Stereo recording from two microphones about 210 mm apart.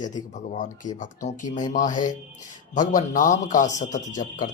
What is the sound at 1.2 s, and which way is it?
A man's voice, 35° left (ahead or behind).